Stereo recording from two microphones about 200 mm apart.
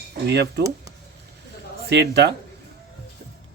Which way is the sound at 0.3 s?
55° right (ahead or behind).